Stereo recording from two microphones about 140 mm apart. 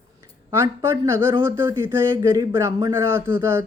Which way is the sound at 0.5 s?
20° right (ahead or behind).